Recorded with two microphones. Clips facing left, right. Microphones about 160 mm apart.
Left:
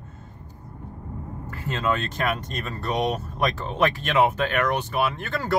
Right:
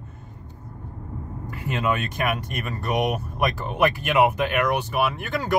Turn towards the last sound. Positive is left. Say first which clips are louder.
# right 1 dB
turn(degrees=-15)  # may be behind; listen again after turning